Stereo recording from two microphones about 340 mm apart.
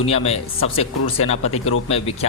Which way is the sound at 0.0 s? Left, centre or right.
Centre.